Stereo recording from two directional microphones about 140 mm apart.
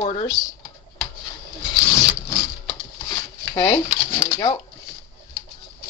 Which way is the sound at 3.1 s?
30° left (ahead or behind).